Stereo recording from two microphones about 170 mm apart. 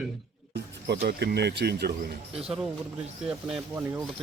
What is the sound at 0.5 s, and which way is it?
Speech, 75° right (ahead or behind).